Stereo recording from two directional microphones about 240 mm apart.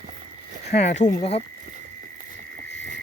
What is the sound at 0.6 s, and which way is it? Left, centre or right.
Speech, left.